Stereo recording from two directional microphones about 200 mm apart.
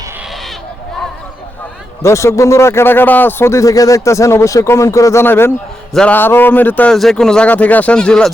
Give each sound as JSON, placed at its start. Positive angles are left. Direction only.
{"t": 2.0, "sound": "a man's voice", "side_deg": 15}